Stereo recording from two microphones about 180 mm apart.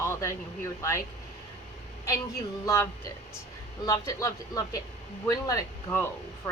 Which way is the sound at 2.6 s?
15° left (ahead or behind).